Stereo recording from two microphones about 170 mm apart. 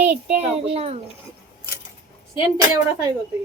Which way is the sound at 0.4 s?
35° right (ahead or behind).